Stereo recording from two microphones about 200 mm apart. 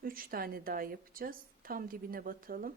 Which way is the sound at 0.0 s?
45° right (ahead or behind).